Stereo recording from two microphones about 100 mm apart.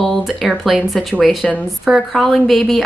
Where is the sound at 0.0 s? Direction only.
Centre (ahead or behind).